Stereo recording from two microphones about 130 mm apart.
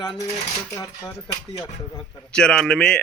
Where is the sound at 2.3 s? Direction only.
5° left (ahead or behind).